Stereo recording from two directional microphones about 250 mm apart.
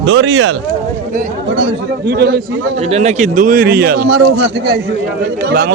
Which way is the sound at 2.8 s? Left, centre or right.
Right.